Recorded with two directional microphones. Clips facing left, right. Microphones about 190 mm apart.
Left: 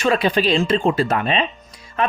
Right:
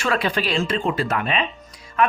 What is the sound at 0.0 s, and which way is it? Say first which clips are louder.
Speech: left 5 dB; 20° left (ahead or behind).